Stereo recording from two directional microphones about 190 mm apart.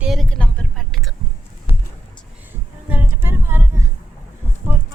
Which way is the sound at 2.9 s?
10° right (ahead or behind).